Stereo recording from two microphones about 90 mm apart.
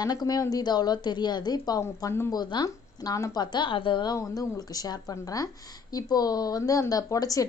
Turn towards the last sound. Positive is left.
turn(degrees=40)  # may be behind; listen again after turning